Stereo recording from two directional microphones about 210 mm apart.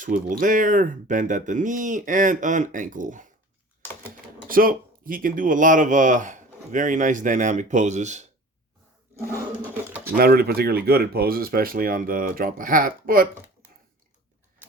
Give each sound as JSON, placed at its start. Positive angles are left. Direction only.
{"t": 0.0, "sound": "speech", "side_deg": -40}
{"t": 4.4, "sound": "speech", "side_deg": -40}
{"t": 9.2, "sound": "a sound", "side_deg": -10}
{"t": 10.2, "sound": "speech", "side_deg": -45}